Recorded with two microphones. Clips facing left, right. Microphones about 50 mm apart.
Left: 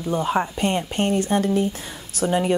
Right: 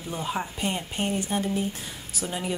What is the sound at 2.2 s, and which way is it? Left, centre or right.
Speech, left.